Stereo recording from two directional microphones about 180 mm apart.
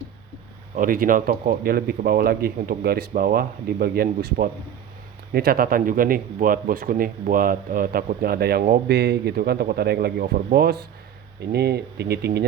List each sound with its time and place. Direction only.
0.8 s speech: 50° right (ahead or behind)